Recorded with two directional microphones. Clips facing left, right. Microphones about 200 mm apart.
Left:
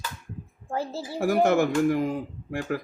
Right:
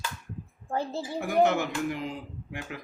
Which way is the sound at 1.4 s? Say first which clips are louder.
Left 6 dB; 50° left (ahead or behind).